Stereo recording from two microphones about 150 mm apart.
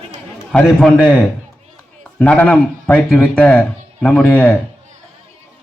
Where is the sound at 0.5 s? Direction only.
5° left (ahead or behind).